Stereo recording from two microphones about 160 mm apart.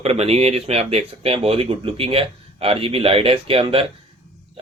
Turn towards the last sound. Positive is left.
turn(degrees=-35)  # may be behind; listen again after turning